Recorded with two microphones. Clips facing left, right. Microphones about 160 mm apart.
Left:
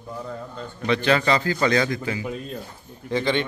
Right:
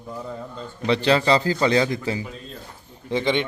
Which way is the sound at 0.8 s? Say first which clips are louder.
Right 1 dB; 30° right (ahead or behind).